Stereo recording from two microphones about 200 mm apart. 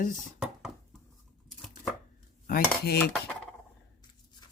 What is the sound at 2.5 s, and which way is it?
Speech, 55° left (ahead or behind).